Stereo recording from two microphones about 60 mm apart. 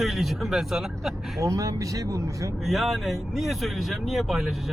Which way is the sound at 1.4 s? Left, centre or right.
Right.